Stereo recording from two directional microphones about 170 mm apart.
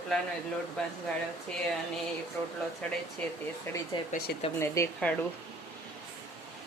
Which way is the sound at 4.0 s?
30° left (ahead or behind).